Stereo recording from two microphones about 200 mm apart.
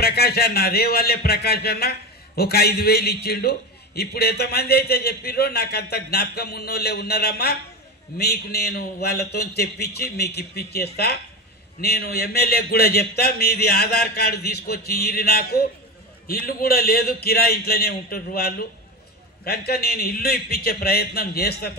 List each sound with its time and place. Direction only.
0.0 s a man's voice: 50° left (ahead or behind)